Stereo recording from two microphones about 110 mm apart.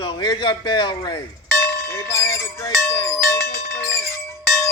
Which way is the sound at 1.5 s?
25° left (ahead or behind).